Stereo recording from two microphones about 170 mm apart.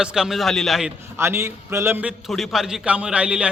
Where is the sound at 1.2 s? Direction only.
15° right (ahead or behind).